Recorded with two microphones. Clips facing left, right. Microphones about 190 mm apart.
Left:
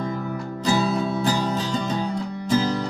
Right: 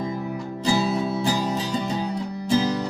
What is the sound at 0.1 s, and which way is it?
Music, 15° right (ahead or behind).